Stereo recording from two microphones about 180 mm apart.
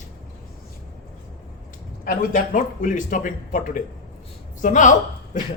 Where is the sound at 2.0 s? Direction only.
50° left (ahead or behind).